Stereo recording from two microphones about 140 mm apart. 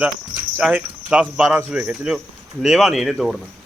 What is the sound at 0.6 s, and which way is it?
A man's voice, 10° right (ahead or behind).